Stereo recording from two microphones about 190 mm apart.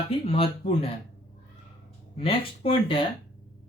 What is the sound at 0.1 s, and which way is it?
Speech, 30° left (ahead or behind).